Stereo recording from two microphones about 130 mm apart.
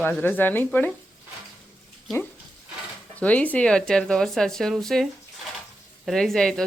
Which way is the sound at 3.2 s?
10° left (ahead or behind).